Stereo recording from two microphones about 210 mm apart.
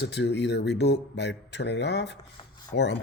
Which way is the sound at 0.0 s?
55° left (ahead or behind).